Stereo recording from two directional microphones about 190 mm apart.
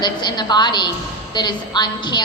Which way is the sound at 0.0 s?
25° left (ahead or behind).